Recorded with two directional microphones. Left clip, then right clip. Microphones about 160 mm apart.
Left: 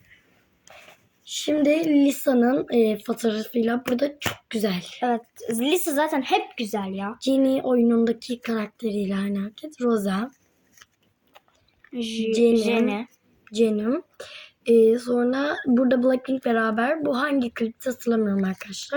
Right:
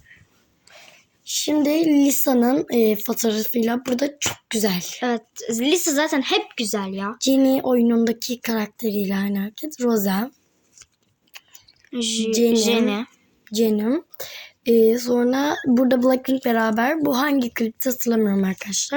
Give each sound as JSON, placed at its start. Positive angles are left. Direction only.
{"t": 0.8, "sound": "a woman's voice", "side_deg": -40}
{"t": 5.0, "sound": "a woman's voice", "side_deg": -30}
{"t": 11.9, "sound": "a woman's voice", "side_deg": -45}